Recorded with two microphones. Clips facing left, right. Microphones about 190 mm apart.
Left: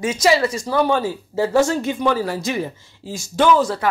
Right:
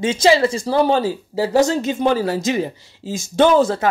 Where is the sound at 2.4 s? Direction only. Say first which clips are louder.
Right 3 dB; 20° right (ahead or behind).